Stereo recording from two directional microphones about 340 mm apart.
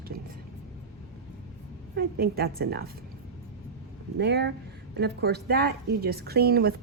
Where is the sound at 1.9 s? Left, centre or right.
Right.